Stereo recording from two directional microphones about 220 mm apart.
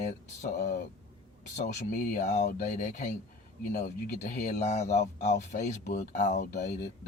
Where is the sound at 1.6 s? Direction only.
40° left (ahead or behind).